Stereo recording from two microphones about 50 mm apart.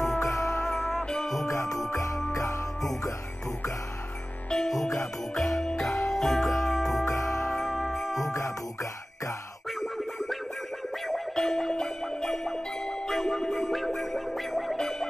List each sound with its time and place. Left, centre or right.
0.0 s music: centre
1.9 s jingle bell: left
2.3 s music: left
4.5 s music: centre
8.3 s music: left
9.7 s music: centre